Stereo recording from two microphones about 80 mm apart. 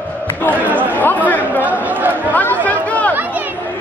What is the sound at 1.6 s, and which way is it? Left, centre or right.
Chatter, right.